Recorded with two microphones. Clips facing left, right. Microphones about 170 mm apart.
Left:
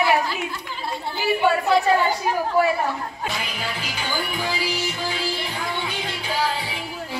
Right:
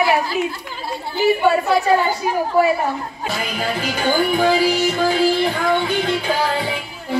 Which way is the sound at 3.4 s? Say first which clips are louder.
Right 7 dB; 50° right (ahead or behind).